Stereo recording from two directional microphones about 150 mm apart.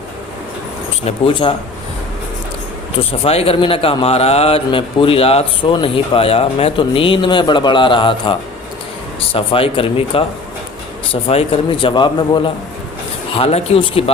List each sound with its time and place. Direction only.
1.0 s a man's voice: 35° left (ahead or behind)
3.1 s a man's voice: 40° left (ahead or behind)